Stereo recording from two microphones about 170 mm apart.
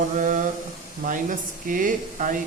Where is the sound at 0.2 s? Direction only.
50° right (ahead or behind).